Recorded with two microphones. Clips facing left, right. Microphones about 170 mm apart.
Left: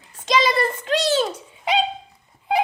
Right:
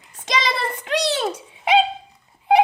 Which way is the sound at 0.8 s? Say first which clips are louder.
Even; 65° right (ahead or behind).